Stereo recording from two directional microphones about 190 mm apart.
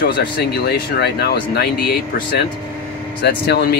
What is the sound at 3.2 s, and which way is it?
Speech, 60° left (ahead or behind).